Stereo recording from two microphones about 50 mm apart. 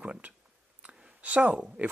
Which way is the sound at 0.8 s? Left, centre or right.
Right.